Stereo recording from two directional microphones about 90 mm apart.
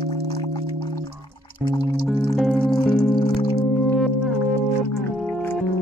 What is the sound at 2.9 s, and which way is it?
Music, 10° left (ahead or behind).